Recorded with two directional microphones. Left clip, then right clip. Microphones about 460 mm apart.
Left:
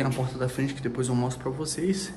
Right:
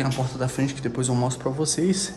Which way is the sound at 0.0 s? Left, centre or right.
Centre.